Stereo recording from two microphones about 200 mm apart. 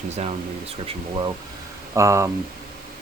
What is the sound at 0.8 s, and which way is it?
Speech, 25° right (ahead or behind).